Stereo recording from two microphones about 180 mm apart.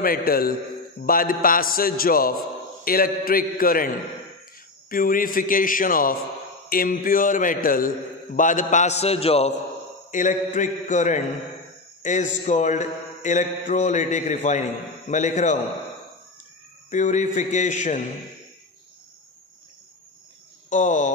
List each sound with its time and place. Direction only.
0.0 s a man's voice: 55° left (ahead or behind)
8.4 s mantra: 45° left (ahead or behind)
10.1 s a man's voice: 45° left (ahead or behind)
12.0 s mantra: 45° left (ahead or behind)
16.9 s mantra: 40° left (ahead or behind)
20.7 s a man's voice: 45° left (ahead or behind)